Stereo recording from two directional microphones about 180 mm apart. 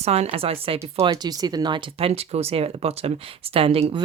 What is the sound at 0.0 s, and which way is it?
Speech, 35° right (ahead or behind).